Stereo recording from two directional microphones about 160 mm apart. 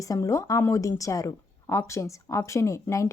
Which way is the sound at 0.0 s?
20° left (ahead or behind).